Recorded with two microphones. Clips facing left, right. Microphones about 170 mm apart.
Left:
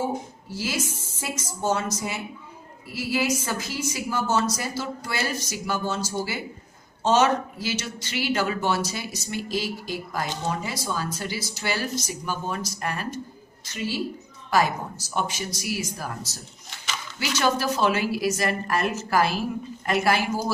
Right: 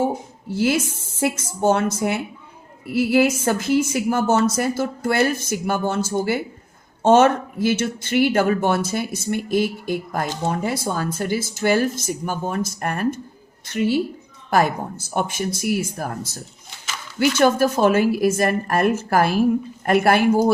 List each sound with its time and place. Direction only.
0.5 s speech: 60° right (ahead or behind)